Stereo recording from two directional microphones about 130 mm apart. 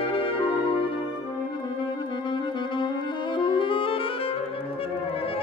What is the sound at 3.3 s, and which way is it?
Music, 40° left (ahead or behind).